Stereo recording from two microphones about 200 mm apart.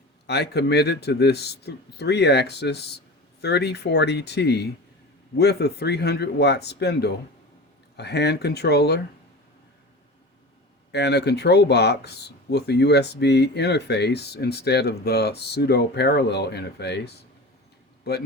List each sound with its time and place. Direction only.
0.3 s speech: 55° left (ahead or behind)
10.9 s speech: 55° left (ahead or behind)